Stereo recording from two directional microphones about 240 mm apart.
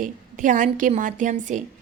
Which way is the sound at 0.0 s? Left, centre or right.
Right.